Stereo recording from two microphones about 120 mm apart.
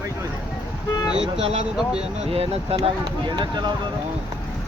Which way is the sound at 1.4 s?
55° right (ahead or behind).